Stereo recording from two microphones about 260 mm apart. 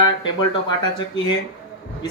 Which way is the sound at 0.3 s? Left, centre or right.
Centre.